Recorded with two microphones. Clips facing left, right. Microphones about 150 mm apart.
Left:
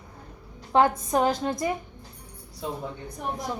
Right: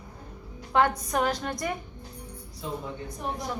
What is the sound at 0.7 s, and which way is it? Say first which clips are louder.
A woman's voice: left 3 dB; 25° left (ahead or behind).